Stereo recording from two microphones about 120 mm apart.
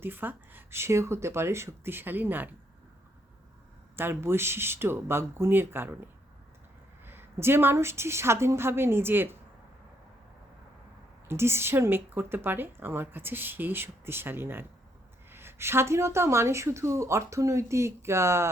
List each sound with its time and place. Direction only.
0.0 s speech: 15° right (ahead or behind)
3.9 s speech: 20° right (ahead or behind)
7.0 s speech: 20° right (ahead or behind)
11.3 s speech: 20° right (ahead or behind)